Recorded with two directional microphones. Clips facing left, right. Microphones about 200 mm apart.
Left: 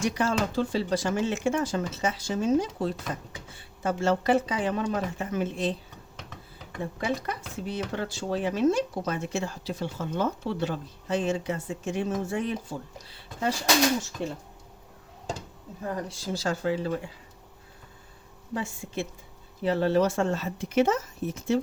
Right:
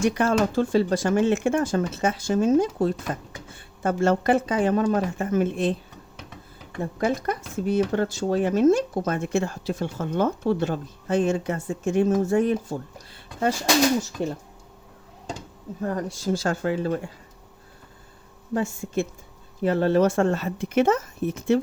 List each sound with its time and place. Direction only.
0.0 s speech: 55° right (ahead or behind)
7.0 s speech: 45° right (ahead or behind)
15.8 s speech: 45° right (ahead or behind)
18.5 s speech: 45° right (ahead or behind)